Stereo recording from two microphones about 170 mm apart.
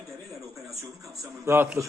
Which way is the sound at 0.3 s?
Centre (ahead or behind).